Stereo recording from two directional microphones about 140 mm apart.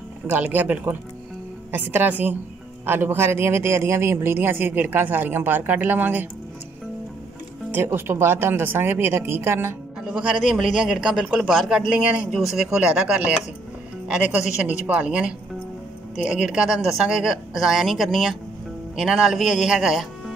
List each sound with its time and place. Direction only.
0.3 s speech: 10° right (ahead or behind)
7.7 s speech: 15° right (ahead or behind)
10.0 s a man's voice: 5° right (ahead or behind)